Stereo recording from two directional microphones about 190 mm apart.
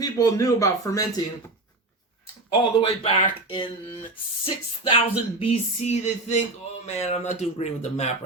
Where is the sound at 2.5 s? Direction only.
30° left (ahead or behind).